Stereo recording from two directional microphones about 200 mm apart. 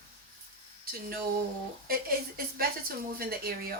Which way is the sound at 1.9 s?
50° right (ahead or behind).